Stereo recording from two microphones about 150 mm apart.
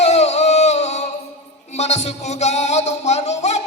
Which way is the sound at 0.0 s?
45° left (ahead or behind).